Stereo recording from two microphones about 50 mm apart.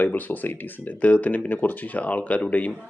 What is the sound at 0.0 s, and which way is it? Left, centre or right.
Speech, left.